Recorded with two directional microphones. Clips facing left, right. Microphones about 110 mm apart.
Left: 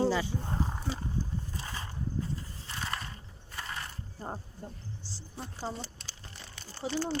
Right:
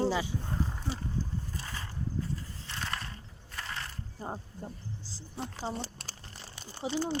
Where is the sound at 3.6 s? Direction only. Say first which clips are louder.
Even; 10° left (ahead or behind).